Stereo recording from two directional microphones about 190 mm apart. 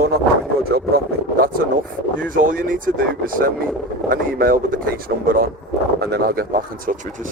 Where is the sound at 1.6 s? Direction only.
50° right (ahead or behind).